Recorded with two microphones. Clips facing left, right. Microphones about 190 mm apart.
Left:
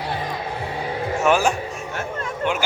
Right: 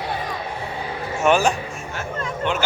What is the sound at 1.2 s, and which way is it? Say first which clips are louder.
Speech: right 1 dB; 5° left (ahead or behind).